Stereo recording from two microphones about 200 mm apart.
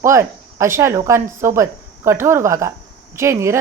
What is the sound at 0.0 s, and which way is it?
Speech, 15° right (ahead or behind).